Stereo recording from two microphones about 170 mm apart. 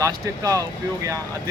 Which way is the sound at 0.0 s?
20° right (ahead or behind).